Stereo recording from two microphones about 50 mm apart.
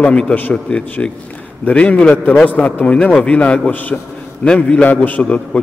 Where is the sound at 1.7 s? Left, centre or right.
Left.